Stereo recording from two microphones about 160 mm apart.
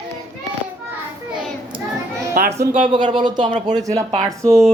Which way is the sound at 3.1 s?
30° right (ahead or behind).